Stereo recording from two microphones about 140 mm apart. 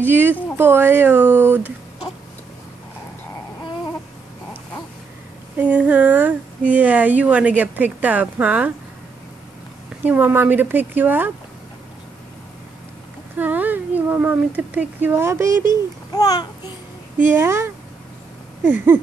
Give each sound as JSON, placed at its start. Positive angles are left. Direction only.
{"t": 0.0, "sound": "speech", "side_deg": -15}
{"t": 5.6, "sound": "speech", "side_deg": -10}
{"t": 10.0, "sound": "speech", "side_deg": -15}
{"t": 13.4, "sound": "a woman's voice", "side_deg": -10}
{"t": 15.7, "sound": "a child's voice", "side_deg": 30}
{"t": 17.3, "sound": "speech", "side_deg": -15}